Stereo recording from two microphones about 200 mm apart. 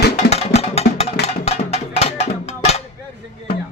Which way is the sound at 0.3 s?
30° left (ahead or behind).